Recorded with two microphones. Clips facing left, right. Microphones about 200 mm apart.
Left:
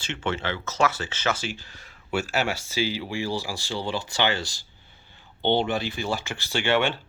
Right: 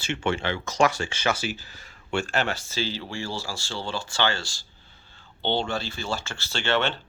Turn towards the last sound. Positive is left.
turn(degrees=10)  # may be behind; listen again after turning